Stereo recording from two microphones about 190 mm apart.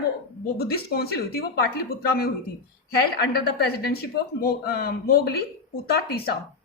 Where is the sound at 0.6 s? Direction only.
55° left (ahead or behind).